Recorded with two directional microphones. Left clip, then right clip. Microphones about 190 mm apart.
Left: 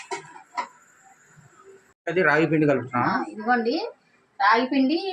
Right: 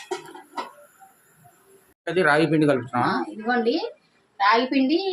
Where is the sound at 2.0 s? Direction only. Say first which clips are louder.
Right 1 dB; 5° right (ahead or behind).